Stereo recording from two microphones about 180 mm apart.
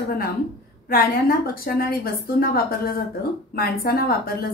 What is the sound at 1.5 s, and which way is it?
A woman's voice, 55° left (ahead or behind).